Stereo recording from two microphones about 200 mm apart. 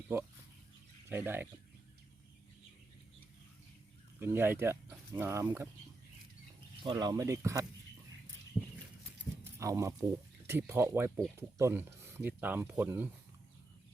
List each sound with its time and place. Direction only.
0.1 s speech: 10° right (ahead or behind)
4.2 s speech: 10° right (ahead or behind)
6.8 s speech: 20° right (ahead or behind)
9.6 s speech: 15° right (ahead or behind)